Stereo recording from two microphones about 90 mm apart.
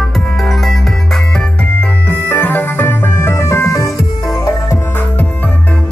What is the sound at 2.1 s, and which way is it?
Music, 20° left (ahead or behind).